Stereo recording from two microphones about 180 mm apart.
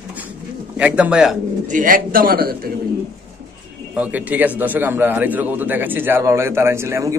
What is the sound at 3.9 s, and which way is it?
A man's voice, 10° right (ahead or behind).